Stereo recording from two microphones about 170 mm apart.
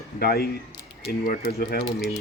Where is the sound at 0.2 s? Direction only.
65° left (ahead or behind).